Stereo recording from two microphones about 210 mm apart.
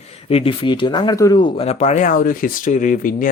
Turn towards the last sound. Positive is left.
turn(degrees=40)  # may be behind; listen again after turning